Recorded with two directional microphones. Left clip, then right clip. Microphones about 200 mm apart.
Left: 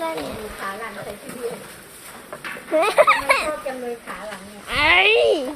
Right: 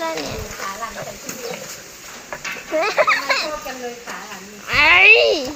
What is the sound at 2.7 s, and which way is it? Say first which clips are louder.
Speech: left 1 dB; 20° left (ahead or behind).